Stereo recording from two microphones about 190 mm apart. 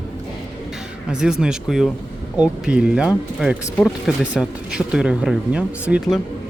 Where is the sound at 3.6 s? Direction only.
10° left (ahead or behind).